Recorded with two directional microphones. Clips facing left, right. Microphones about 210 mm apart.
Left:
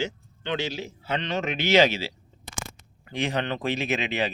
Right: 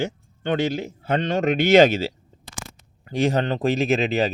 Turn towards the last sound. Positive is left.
turn(degrees=-40)  # may be behind; listen again after turning